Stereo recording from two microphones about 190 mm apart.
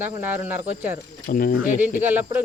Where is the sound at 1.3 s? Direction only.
45° left (ahead or behind).